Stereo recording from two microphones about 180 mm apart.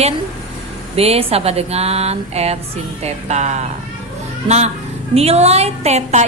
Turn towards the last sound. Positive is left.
turn(degrees=-40)  # may be behind; listen again after turning